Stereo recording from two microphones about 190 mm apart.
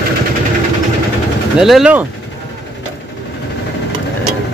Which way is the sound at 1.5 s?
Centre (ahead or behind).